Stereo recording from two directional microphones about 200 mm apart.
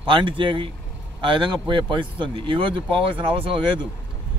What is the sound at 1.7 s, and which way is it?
Speech, 25° right (ahead or behind).